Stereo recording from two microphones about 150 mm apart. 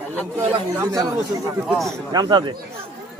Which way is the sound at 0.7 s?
20° right (ahead or behind).